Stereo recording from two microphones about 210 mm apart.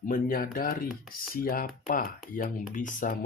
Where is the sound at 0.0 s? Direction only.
40° left (ahead or behind).